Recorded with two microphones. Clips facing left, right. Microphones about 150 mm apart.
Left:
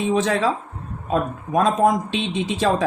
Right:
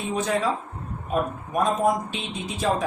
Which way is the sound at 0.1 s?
90° left.